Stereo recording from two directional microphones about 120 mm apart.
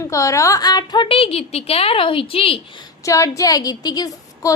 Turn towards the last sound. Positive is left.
turn(degrees=35)  # may be behind; listen again after turning